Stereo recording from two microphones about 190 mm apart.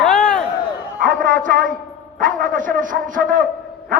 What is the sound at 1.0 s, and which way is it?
A man's voice, 45° right (ahead or behind).